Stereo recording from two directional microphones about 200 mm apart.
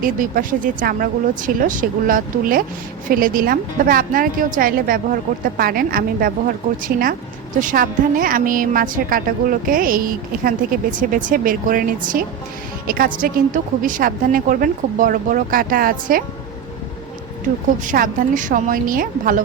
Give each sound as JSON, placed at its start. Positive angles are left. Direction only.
{"t": 0.0, "sound": "a woman's voice", "side_deg": -45}
{"t": 13.2, "sound": "a woman's voice", "side_deg": -40}
{"t": 17.8, "sound": "a woman's voice", "side_deg": -40}